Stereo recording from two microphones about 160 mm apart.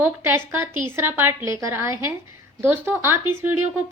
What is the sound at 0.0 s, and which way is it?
A woman's voice, 15° right (ahead or behind).